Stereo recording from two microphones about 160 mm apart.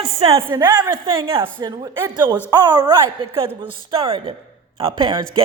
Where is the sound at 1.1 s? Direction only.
35° right (ahead or behind).